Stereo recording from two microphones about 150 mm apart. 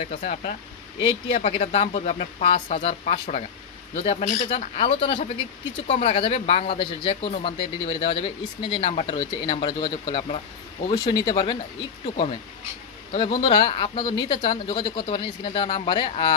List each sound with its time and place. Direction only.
0.0 s a man's voice: 45° left (ahead or behind)
13.1 s speech: 40° left (ahead or behind)